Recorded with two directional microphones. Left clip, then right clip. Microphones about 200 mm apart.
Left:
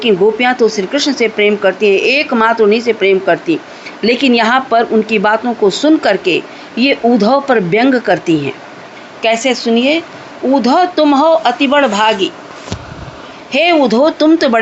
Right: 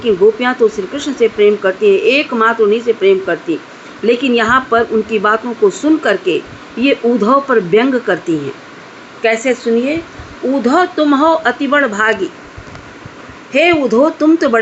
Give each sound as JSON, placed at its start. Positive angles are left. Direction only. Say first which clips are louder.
{"t": 0.0, "sound": "speech", "louder": "left 1 dB", "side_deg": 15}
{"t": 9.3, "sound": "a woman's voice", "louder": "left 2 dB", "side_deg": 30}
{"t": 9.6, "sound": "speech", "louder": "left 2 dB", "side_deg": 20}
{"t": 13.5, "sound": "speech", "louder": "left 1 dB", "side_deg": 15}